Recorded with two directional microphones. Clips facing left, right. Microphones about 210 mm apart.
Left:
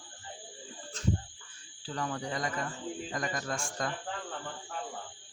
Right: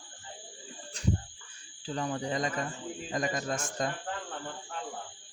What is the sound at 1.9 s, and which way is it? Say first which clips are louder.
Speech: right 3 dB; 20° right (ahead or behind).